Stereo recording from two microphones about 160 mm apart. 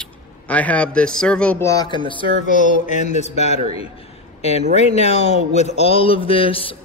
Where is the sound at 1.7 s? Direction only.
25° left (ahead or behind).